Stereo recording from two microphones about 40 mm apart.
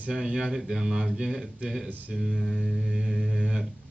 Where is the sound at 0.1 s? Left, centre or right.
Centre.